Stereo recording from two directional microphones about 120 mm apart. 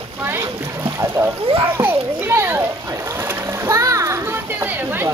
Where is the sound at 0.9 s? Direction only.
25° right (ahead or behind).